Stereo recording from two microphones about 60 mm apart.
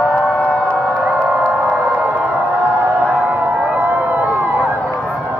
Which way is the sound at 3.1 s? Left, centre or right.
Right.